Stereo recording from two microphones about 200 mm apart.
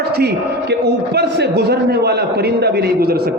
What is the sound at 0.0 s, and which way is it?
A man's voice, 55° right (ahead or behind).